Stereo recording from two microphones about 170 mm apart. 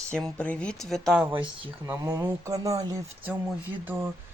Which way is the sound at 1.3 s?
30° right (ahead or behind).